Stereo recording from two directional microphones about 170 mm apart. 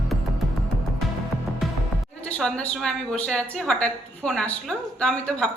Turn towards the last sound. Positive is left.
turn(degrees=5)  # may be behind; listen again after turning